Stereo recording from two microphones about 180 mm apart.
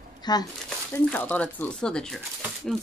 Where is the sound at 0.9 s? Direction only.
10° left (ahead or behind).